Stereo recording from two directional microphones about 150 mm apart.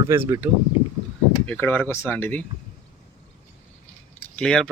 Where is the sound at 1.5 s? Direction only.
10° left (ahead or behind).